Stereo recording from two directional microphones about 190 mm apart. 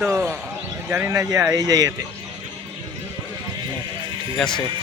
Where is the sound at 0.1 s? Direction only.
15° right (ahead or behind).